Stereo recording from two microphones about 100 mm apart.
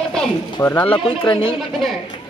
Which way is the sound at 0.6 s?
25° left (ahead or behind).